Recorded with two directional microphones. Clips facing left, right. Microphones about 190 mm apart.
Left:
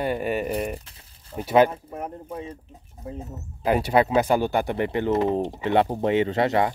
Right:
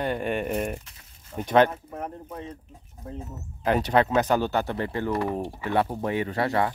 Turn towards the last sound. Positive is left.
turn(degrees=20)  # may be behind; listen again after turning